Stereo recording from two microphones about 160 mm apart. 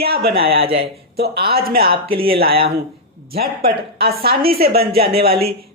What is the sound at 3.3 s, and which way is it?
Speech, 75° right (ahead or behind).